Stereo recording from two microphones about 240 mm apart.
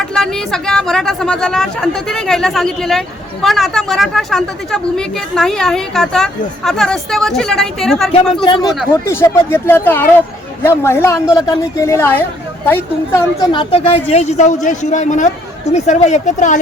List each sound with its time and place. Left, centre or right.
0.0 s a woman's voice: centre
8.1 s a woman's voice: left
9.0 s a woman's voice: centre; by 16.6 s left